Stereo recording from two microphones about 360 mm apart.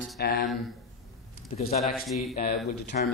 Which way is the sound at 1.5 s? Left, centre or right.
Centre.